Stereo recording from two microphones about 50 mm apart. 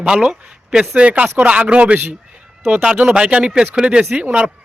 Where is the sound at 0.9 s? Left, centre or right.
Right.